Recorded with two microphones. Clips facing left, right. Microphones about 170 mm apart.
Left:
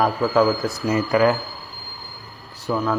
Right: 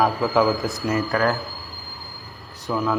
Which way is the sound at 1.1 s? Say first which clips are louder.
Left 6 dB; 15° left (ahead or behind).